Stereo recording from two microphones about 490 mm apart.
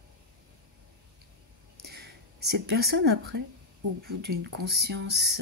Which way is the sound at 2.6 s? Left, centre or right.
Centre.